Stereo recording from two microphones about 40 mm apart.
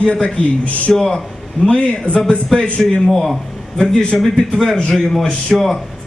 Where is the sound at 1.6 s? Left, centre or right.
Left.